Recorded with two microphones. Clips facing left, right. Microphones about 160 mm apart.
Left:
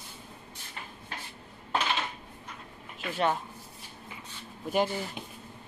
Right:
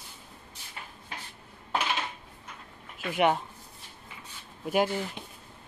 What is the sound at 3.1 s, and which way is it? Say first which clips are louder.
Speech: right 3 dB; 15° right (ahead or behind).